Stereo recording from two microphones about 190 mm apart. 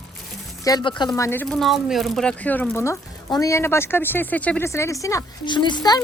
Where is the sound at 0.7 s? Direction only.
20° left (ahead or behind).